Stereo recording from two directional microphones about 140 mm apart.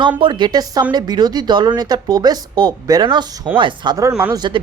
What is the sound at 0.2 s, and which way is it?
Speech, 35° right (ahead or behind).